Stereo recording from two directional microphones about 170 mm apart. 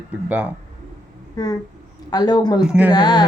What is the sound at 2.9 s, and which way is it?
Speech, 25° left (ahead or behind).